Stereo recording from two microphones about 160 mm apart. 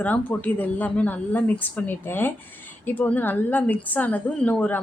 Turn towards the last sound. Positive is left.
turn(degrees=10)  # may be behind; listen again after turning